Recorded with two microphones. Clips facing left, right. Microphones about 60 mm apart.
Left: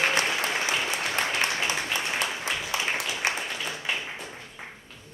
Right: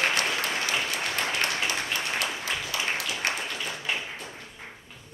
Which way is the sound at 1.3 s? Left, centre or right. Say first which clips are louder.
Left 1 dB; left.